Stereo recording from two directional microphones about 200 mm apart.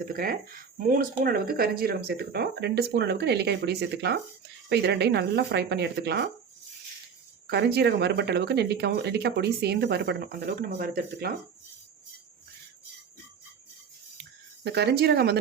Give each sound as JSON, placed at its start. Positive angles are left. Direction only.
{"t": 0.1, "sound": "speech", "side_deg": -45}
{"t": 7.4, "sound": "speech", "side_deg": -55}
{"t": 14.6, "sound": "speech", "side_deg": -55}